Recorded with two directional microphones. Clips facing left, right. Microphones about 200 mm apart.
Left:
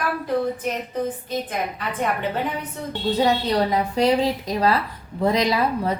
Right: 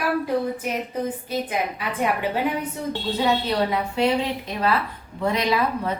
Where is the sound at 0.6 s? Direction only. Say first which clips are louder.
Left 1 dB; 10° right (ahead or behind).